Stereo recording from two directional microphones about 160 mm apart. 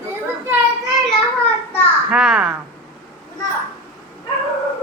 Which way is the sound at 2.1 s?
5° right (ahead or behind).